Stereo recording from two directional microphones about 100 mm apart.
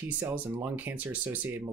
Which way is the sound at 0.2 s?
20° right (ahead or behind).